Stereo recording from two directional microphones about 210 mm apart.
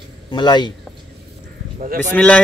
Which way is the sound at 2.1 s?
5° left (ahead or behind).